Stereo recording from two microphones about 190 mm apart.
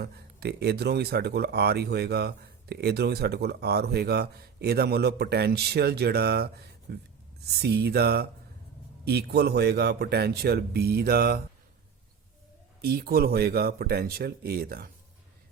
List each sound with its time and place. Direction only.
0.0 s speech: 60° right (ahead or behind)
12.8 s speech: 55° right (ahead or behind)